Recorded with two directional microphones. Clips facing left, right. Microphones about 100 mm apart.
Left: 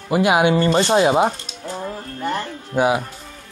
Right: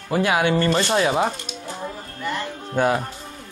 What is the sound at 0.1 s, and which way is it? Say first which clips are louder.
Speech: left 4 dB; 15° left (ahead or behind).